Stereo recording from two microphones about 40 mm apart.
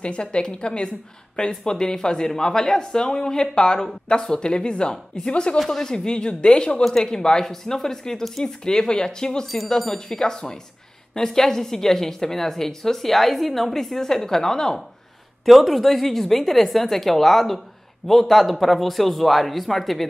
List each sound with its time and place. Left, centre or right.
0.0 s speech: left
5.6 s speech: centre
5.9 s speech: left
9.7 s speech: centre
15.4 s a woman's voice: centre